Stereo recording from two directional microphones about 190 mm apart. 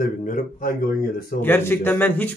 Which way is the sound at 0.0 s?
45° left (ahead or behind).